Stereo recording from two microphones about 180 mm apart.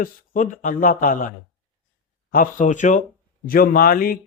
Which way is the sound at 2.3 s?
45° left (ahead or behind).